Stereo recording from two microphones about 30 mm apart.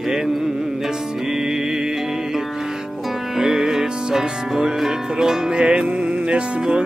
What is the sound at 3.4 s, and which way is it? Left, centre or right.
Music, centre.